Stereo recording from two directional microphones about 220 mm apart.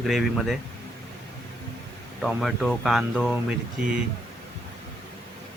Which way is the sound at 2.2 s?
Centre (ahead or behind).